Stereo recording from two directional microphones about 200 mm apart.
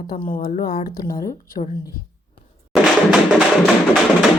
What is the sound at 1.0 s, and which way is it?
Speech, 15° left (ahead or behind).